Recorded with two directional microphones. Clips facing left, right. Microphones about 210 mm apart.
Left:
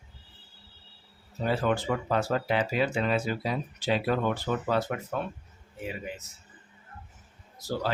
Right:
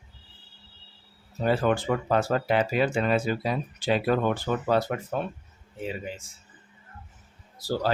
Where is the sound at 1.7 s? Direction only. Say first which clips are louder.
Right 3 dB; 55° right (ahead or behind).